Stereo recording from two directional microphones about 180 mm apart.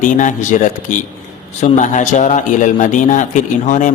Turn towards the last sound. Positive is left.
turn(degrees=45)  # may be behind; listen again after turning